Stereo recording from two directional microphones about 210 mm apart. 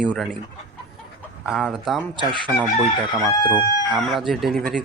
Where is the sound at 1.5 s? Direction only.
Centre (ahead or behind).